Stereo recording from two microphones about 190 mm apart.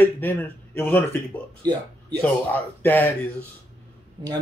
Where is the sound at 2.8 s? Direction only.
10° left (ahead or behind).